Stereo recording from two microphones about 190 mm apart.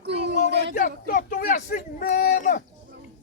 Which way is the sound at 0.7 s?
40° left (ahead or behind).